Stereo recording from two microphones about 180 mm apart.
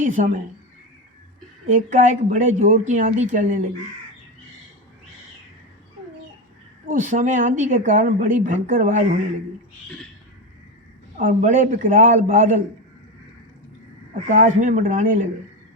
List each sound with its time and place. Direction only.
0.0 s speech: 45° right (ahead or behind)
1.6 s a woman's voice: 45° right (ahead or behind)
6.9 s a woman's voice: 45° right (ahead or behind)
11.2 s a woman's voice: 45° right (ahead or behind)
14.1 s a woman's voice: 45° right (ahead or behind)